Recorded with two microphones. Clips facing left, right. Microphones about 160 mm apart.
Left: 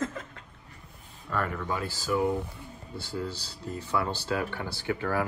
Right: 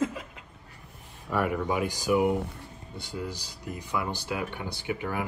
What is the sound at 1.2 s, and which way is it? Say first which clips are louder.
Speech: right 4 dB; 10° right (ahead or behind).